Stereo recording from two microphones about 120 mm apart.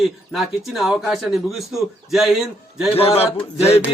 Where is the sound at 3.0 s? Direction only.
55° left (ahead or behind).